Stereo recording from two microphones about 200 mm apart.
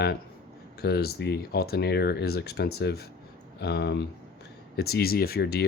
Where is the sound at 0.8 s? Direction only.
55° left (ahead or behind).